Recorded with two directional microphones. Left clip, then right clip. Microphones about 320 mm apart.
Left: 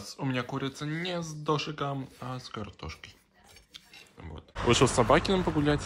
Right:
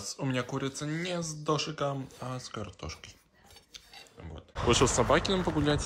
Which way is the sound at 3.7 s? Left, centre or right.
Centre.